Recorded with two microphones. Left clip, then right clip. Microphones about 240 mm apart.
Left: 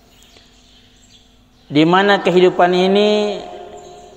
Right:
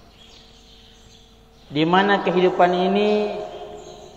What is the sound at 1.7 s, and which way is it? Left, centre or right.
A man's voice, left.